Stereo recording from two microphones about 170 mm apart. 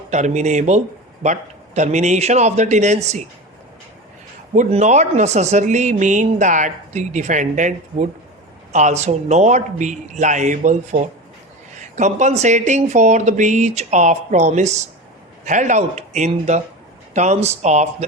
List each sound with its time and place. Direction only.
0.1 s speech: 45° right (ahead or behind)
4.5 s speech: 45° right (ahead or behind)